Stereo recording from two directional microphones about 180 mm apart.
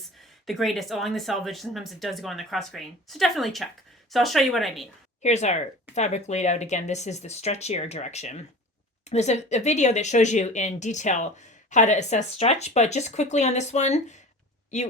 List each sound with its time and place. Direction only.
0.4 s speech: centre (ahead or behind)
5.2 s speech: 40° left (ahead or behind)